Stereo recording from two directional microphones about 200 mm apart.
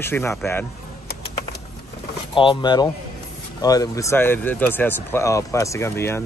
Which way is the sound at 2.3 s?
25° left (ahead or behind).